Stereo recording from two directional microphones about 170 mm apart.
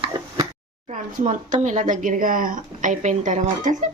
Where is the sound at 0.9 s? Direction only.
45° right (ahead or behind).